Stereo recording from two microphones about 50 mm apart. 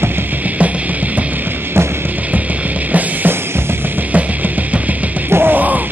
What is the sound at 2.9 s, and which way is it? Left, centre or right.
Music, right.